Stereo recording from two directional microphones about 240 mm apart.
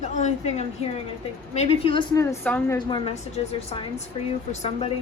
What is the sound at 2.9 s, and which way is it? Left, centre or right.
Speech, left.